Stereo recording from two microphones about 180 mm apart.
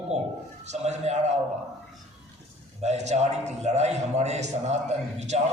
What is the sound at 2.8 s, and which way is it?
A man's voice, 40° right (ahead or behind).